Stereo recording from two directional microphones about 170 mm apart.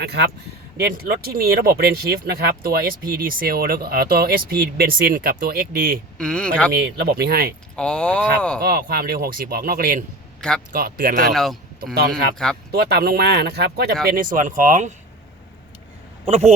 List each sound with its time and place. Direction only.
0.0 s speech: 70° right (ahead or behind)
6.1 s speech: 5° left (ahead or behind)
6.7 s speech: 70° right (ahead or behind)
7.8 s speech: 5° left (ahead or behind)
8.6 s speech: 65° right (ahead or behind)
12.7 s speech: 65° right (ahead or behind); by 14.9 s 45° right (ahead or behind)
16.2 s speech: 40° right (ahead or behind)